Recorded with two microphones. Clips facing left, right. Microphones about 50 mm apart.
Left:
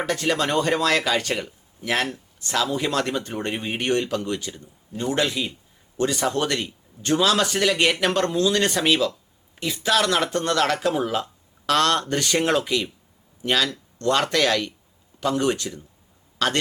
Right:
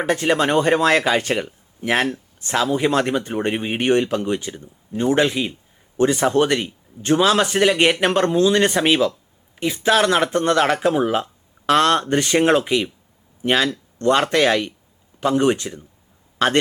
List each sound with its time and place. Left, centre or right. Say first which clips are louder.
0.0 s speech: right 5 dB; right